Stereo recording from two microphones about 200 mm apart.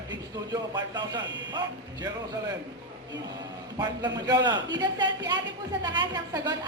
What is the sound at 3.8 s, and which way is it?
A woman's voice, 20° right (ahead or behind).